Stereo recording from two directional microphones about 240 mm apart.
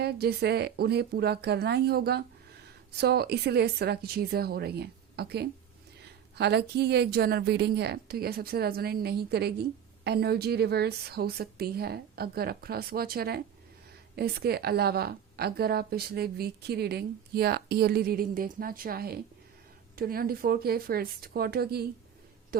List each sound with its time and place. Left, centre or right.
0.0 s a woman's voice: right